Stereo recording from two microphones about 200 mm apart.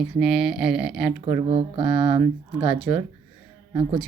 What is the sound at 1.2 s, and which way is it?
Speech, 30° right (ahead or behind).